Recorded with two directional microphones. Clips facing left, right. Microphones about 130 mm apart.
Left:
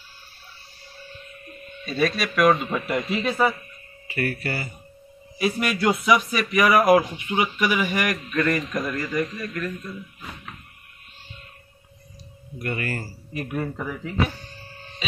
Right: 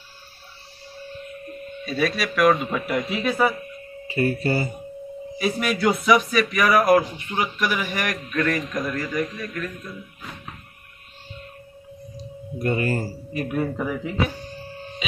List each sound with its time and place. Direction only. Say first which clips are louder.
1.9 s a man's voice: even; centre (ahead or behind)
4.1 s speech: right 5 dB; 25° right (ahead or behind)
5.4 s a man's voice: right 1 dB; centre (ahead or behind)
12.5 s speech: right 6 dB; 25° right (ahead or behind)
13.3 s a man's voice: right 3 dB; centre (ahead or behind)